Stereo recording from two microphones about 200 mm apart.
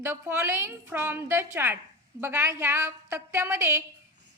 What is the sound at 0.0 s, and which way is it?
A woman's voice, 10° right (ahead or behind).